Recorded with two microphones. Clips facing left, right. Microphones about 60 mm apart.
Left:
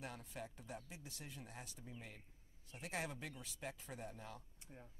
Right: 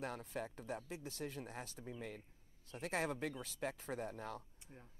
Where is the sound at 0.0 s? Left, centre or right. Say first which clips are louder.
Right 6 dB; right.